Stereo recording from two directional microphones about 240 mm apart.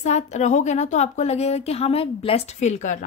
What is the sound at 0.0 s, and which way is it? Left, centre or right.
A woman's voice, left.